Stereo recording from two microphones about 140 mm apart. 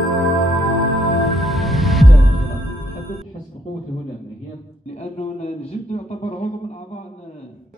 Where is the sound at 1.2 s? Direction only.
Centre (ahead or behind).